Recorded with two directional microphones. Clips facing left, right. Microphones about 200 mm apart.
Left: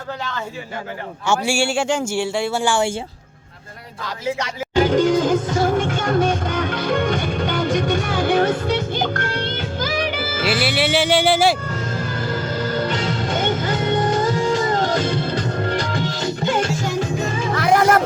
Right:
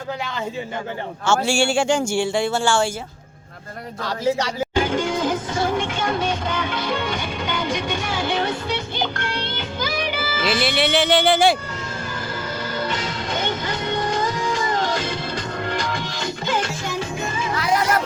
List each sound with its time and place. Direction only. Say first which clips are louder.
1.5 s speech: right 1 dB; 5° left (ahead or behind)
4.0 s speech: right 3 dB; 35° right (ahead or behind)
4.8 s music: left 7 dB; 40° left (ahead or behind)
10.6 s speech: even; 5° left (ahead or behind)
13.2 s music: left 3 dB; 50° left (ahead or behind)
16.5 s music: left 3 dB; 40° left (ahead or behind)